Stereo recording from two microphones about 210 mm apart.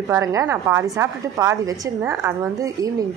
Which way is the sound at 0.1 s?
15° right (ahead or behind).